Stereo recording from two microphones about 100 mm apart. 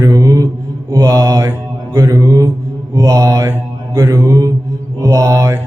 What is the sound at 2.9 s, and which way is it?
Mantra, 35° right (ahead or behind).